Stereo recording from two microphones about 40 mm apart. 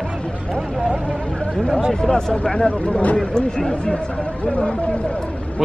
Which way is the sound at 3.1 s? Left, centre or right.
Centre.